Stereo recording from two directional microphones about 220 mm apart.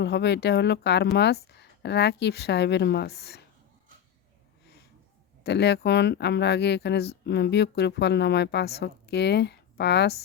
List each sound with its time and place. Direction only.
0.0 s speech: 50° left (ahead or behind)
5.4 s speech: 50° left (ahead or behind)